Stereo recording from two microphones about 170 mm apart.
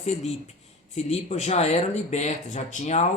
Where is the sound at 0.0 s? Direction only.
40° left (ahead or behind).